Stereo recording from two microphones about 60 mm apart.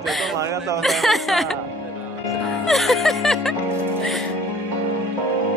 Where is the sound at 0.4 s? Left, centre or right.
Right.